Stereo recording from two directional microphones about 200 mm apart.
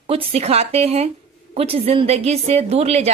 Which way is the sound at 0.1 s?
30° right (ahead or behind).